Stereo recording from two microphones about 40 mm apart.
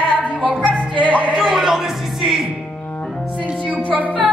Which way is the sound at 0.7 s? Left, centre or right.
Left.